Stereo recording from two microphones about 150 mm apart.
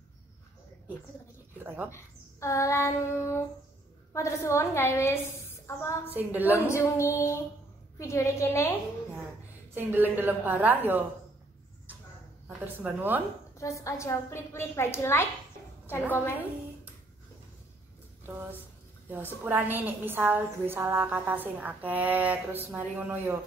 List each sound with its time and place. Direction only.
1.9 s a woman's voice: 20° left (ahead or behind)
6.1 s a woman's voice: 10° right (ahead or behind)
6.7 s child singing: 15° left (ahead or behind)
8.0 s a woman's voice: 20° left (ahead or behind)
9.8 s a woman's voice: 15° right (ahead or behind)
12.4 s speech: 15° right (ahead or behind)
13.6 s a woman's voice: 20° left (ahead or behind)
15.9 s child singing: 15° left (ahead or behind)
18.2 s a woman's voice: 15° right (ahead or behind)